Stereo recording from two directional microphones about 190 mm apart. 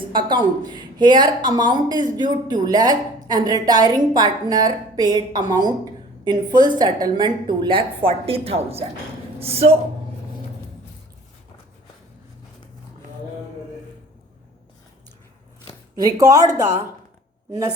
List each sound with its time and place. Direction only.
0.1 s speech: 25° right (ahead or behind)
16.0 s speech: 20° right (ahead or behind)